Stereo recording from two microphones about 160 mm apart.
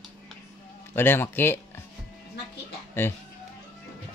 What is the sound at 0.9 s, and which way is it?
Speech, 15° left (ahead or behind).